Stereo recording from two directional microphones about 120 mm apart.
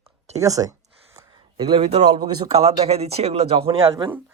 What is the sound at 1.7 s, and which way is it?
Speech, 60° right (ahead or behind).